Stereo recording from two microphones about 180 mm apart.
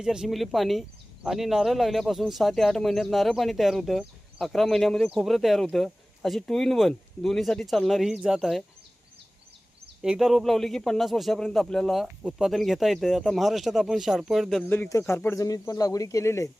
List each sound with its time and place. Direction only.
0.0 s speech: 5° right (ahead or behind)
10.0 s speech: centre (ahead or behind)
14.7 s speech: 15° left (ahead or behind)